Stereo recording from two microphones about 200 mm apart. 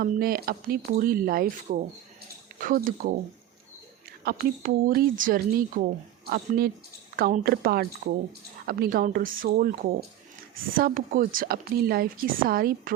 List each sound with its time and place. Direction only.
0.0 s speech: 45° right (ahead or behind)
4.2 s speech: 50° right (ahead or behind)
10.8 s speech: 45° right (ahead or behind)